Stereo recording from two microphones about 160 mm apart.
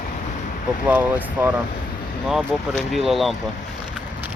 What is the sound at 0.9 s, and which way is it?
Speech, 10° right (ahead or behind).